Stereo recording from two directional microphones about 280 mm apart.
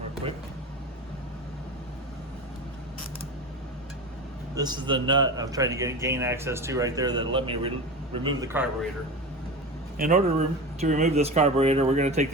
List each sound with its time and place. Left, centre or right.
4.5 s a man's voice: centre
10.0 s speech: right